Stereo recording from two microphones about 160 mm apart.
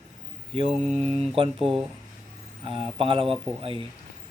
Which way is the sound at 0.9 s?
35° right (ahead or behind).